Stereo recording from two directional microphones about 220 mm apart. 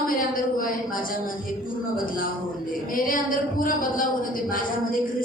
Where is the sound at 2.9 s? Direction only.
40° left (ahead or behind).